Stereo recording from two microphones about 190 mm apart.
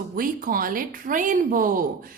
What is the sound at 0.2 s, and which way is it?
Speech, 45° right (ahead or behind).